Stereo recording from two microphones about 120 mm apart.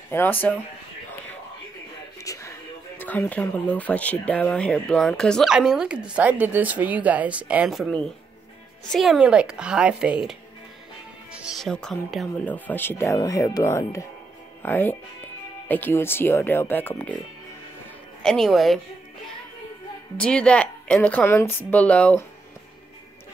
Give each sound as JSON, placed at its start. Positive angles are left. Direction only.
{"t": 0.1, "sound": "speech", "side_deg": 15}
{"t": 2.1, "sound": "music", "side_deg": 25}
{"t": 3.2, "sound": "speech", "side_deg": 10}
{"t": 8.9, "sound": "speech", "side_deg": 0}
{"t": 11.3, "sound": "music", "side_deg": -5}
{"t": 11.6, "sound": "speech", "side_deg": 5}
{"t": 12.4, "sound": "speech", "side_deg": 15}
{"t": 14.6, "sound": "speech", "side_deg": 15}
{"t": 18.2, "sound": "speech", "side_deg": 5}
{"t": 20.2, "sound": "speech", "side_deg": 10}